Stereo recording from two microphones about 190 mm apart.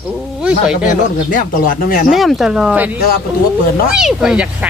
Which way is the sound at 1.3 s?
50° left (ahead or behind).